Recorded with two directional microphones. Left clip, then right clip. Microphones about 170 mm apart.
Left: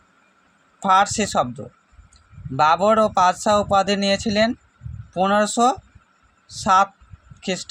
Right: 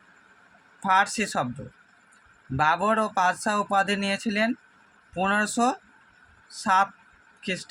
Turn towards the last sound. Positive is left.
turn(degrees=30)  # may be behind; listen again after turning